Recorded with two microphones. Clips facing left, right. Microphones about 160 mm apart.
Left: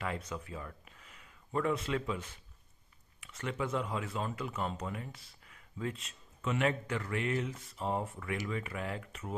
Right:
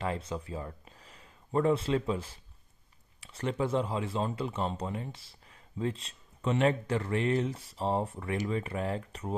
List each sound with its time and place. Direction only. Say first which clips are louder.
0.0 s speech: right 4 dB; 30° right (ahead or behind)